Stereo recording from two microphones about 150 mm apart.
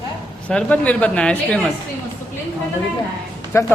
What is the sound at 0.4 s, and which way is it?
Speech, 10° left (ahead or behind).